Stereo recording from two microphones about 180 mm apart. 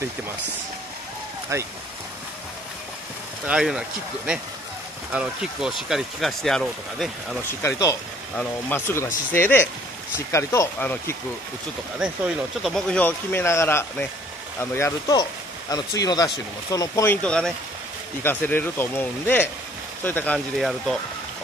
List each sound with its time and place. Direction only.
1.5 s speech: 15° right (ahead or behind)
3.4 s speech: 5° right (ahead or behind)
5.1 s speech: 5° right (ahead or behind)
7.6 s speech: 15° left (ahead or behind)
12.0 s speech: 5° right (ahead or behind)
20.3 s speech: centre (ahead or behind)